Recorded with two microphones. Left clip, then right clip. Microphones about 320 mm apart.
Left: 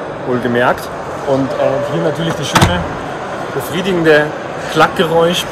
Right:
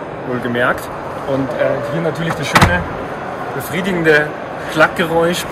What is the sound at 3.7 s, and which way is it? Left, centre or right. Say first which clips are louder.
Speech: left 2 dB; centre.